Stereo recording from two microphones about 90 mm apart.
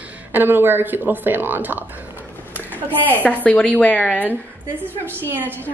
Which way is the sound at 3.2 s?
15° left (ahead or behind).